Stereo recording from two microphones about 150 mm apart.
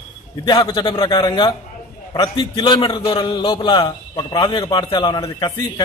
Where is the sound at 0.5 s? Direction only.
30° left (ahead or behind).